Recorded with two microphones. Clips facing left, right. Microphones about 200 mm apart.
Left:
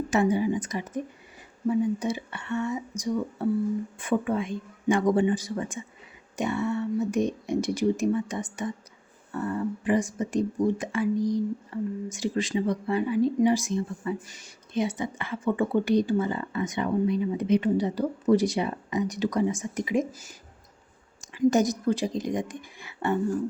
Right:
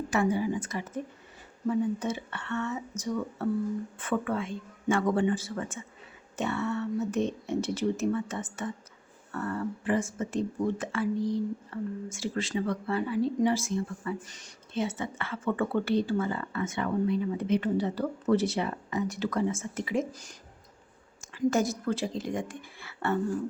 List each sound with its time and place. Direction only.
0.1 s a woman's voice: 20° left (ahead or behind)
21.2 s a woman's voice: 15° left (ahead or behind)